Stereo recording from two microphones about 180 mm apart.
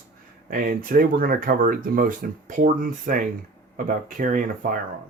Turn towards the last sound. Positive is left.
turn(degrees=-50)  # may be behind; listen again after turning